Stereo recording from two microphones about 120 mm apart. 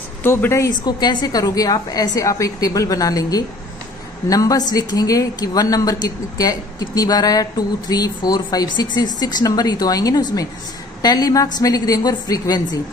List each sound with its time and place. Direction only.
0.2 s a woman's voice: 20° left (ahead or behind)
0.8 s a woman's voice: 35° left (ahead or behind)